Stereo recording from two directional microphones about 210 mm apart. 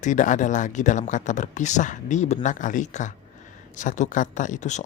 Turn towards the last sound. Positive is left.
turn(degrees=35)  # may be behind; listen again after turning